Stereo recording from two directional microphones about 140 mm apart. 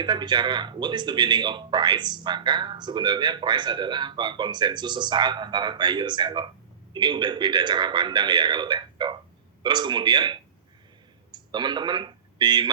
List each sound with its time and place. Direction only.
0.0 s speech: 35° right (ahead or behind)